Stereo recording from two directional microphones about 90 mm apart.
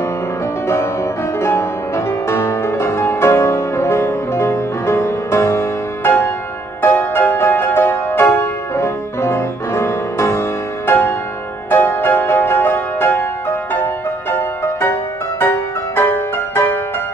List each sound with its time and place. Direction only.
1.4 s music: 30° left (ahead or behind)
14.3 s music: 25° left (ahead or behind)